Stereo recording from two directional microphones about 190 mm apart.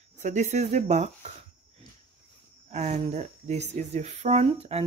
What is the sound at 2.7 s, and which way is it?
Speech, 35° right (ahead or behind).